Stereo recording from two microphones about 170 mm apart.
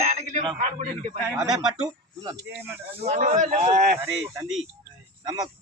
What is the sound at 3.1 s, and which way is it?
Speech, 45° right (ahead or behind).